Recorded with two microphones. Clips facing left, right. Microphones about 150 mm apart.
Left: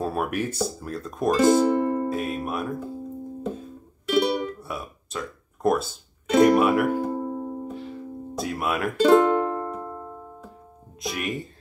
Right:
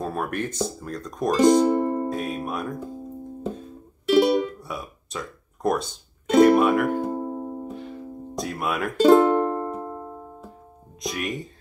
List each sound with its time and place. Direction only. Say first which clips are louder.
0.0 s speech: left 1 dB; 5° left (ahead or behind)
1.7 s music: even; 20° right (ahead or behind)
2.0 s speech: left 1 dB; centre (ahead or behind)
4.6 s music: even; centre (ahead or behind)
7.2 s music: even; 15° right (ahead or behind)
7.6 s music: even; centre (ahead or behind); by 10.1 s 15° right (ahead or behind)
11.0 s speech: even; centre (ahead or behind)